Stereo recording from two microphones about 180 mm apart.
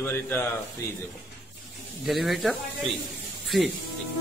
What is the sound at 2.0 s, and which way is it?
A man's voice, centre (ahead or behind).